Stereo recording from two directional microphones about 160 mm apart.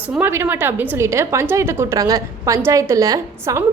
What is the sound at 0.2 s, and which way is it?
A woman's voice, 15° right (ahead or behind).